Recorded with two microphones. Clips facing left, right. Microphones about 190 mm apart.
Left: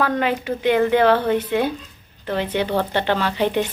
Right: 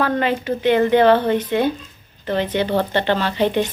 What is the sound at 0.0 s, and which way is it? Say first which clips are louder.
A woman's voice: right 1 dB; 10° left (ahead or behind).